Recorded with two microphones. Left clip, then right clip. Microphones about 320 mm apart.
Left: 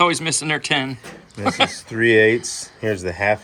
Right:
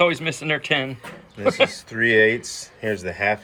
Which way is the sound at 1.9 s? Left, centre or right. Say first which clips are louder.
Left 4 dB; left.